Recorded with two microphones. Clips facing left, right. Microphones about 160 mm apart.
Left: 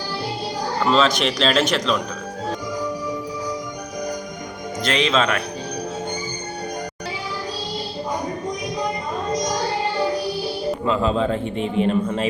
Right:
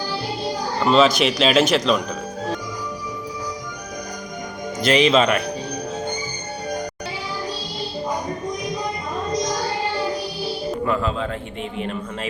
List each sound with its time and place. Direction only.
0.9 s a man's voice: 5° right (ahead or behind)
4.8 s speech: 5° right (ahead or behind)
10.8 s speech: 20° left (ahead or behind)